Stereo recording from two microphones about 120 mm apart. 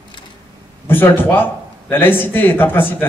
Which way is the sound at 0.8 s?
20° left (ahead or behind).